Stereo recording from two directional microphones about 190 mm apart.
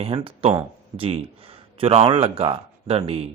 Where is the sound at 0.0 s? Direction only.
30° right (ahead or behind).